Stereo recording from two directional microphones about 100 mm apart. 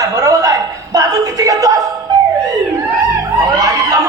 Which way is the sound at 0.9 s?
35° right (ahead or behind).